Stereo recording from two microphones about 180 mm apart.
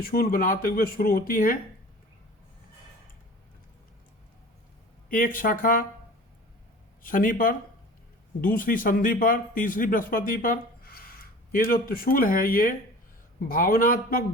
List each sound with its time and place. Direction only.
0.0 s speech: 55° left (ahead or behind)
5.0 s speech: 50° left (ahead or behind)
7.0 s speech: 50° left (ahead or behind)